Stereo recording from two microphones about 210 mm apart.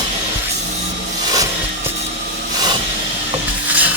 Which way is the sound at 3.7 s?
5° right (ahead or behind).